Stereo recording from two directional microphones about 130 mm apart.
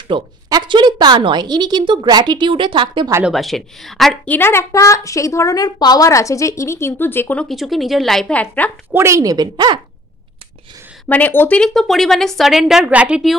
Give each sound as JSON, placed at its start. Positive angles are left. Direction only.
{"t": 0.1, "sound": "a woman's voice", "side_deg": -35}
{"t": 3.3, "sound": "speech", "side_deg": 0}
{"t": 4.3, "sound": "a woman's voice", "side_deg": 15}
{"t": 7.4, "sound": "speech", "side_deg": 0}
{"t": 8.9, "sound": "a woman's voice", "side_deg": -20}
{"t": 11.1, "sound": "speech", "side_deg": 15}